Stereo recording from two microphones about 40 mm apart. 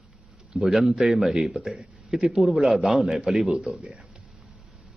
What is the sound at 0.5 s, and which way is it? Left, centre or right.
Speech, centre.